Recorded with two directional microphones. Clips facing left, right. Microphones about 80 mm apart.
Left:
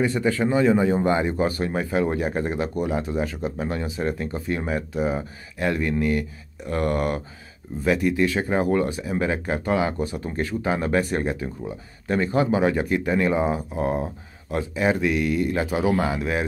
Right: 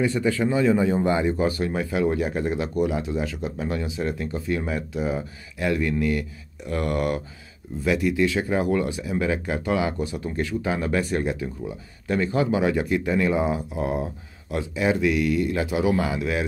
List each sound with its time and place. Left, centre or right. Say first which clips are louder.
0.0 s speech: left 1 dB; left